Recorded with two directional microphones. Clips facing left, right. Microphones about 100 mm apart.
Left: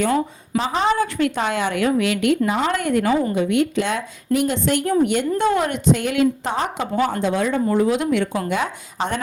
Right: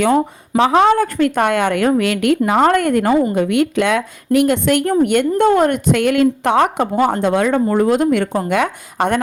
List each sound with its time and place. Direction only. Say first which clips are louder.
0.0 s a woman's voice: right 5 dB; 70° right (ahead or behind)
7.0 s speech: right 5 dB; 55° right (ahead or behind)